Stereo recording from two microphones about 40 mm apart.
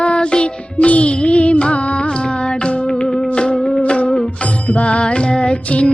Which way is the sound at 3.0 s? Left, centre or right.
Left.